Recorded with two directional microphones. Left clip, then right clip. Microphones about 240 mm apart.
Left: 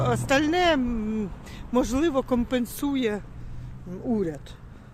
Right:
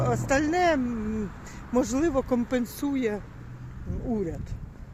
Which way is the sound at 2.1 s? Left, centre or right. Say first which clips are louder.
Left 1 dB; centre.